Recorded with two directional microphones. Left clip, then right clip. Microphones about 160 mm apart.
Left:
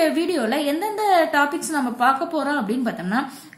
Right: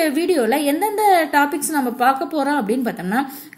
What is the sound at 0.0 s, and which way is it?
A woman's voice, 25° right (ahead or behind).